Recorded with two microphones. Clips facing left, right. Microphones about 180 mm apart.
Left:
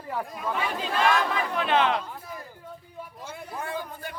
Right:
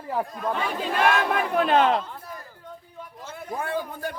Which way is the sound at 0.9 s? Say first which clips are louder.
Right 2 dB; 55° right (ahead or behind).